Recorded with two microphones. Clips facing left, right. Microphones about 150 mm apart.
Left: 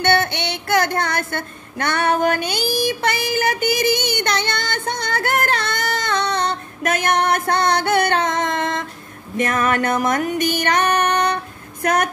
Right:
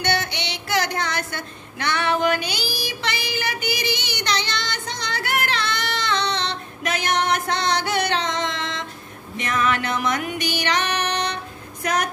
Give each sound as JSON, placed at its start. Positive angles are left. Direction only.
{"t": 0.0, "sound": "a sound", "side_deg": 55}
{"t": 9.4, "sound": "music", "side_deg": 50}
{"t": 11.8, "sound": "speech", "side_deg": 55}